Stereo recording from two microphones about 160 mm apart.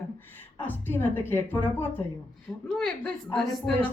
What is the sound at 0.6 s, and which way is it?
Speech, 15° left (ahead or behind).